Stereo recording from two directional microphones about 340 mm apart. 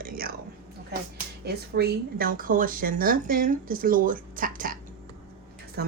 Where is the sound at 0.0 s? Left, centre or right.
Right.